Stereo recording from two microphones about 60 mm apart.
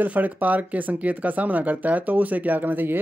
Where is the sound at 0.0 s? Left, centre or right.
Right.